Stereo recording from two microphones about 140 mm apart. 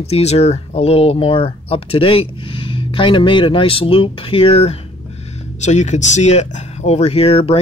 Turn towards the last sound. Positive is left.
turn(degrees=45)  # may be behind; listen again after turning